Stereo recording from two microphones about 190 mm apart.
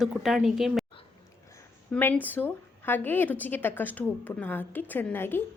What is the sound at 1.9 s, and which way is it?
A woman's voice, 10° left (ahead or behind).